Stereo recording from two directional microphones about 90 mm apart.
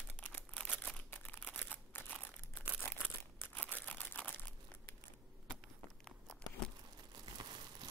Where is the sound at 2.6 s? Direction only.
15° right (ahead or behind).